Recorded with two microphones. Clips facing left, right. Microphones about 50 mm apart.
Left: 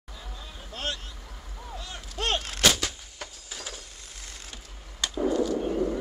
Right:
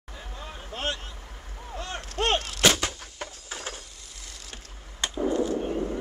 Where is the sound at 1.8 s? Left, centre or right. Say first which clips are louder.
Right 7 dB; right.